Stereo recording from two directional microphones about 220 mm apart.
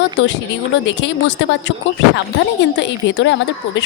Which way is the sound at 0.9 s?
55° left (ahead or behind).